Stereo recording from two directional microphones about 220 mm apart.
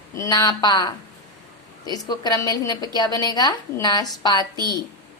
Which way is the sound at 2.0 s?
15° left (ahead or behind).